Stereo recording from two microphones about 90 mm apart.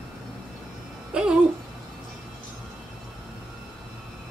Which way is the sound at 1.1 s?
10° right (ahead or behind).